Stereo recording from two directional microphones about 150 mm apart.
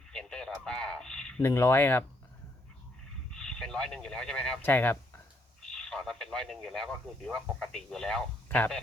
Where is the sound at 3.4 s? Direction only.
5° left (ahead or behind).